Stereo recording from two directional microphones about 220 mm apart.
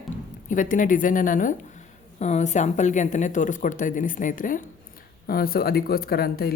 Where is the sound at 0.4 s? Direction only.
35° left (ahead or behind).